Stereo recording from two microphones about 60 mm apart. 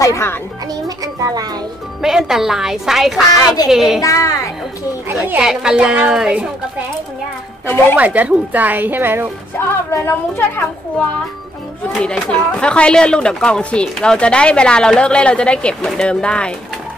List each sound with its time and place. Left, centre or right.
0.0 s a woman's voice: left
0.8 s a child's voice: right
2.0 s a woman's voice: centre
4.0 s speech: left
5.4 s a woman's voice: centre
7.9 s a woman's voice: right
9.6 s a woman's voice: left
11.9 s speech: centre